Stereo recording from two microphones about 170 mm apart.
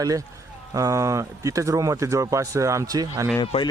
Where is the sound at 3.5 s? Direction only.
40° left (ahead or behind).